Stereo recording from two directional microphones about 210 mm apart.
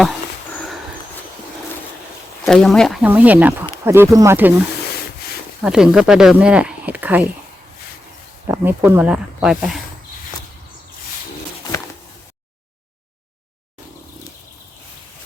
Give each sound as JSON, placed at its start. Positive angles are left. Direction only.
{"t": 2.5, "sound": "speech", "side_deg": 0}
{"t": 5.6, "sound": "speech", "side_deg": -5}
{"t": 8.4, "sound": "speech", "side_deg": -10}